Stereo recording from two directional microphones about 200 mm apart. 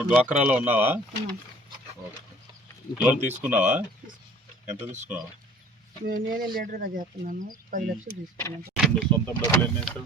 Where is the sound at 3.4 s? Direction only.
5° right (ahead or behind).